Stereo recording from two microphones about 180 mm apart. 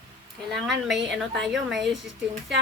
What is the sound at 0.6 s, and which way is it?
A woman's voice, centre (ahead or behind).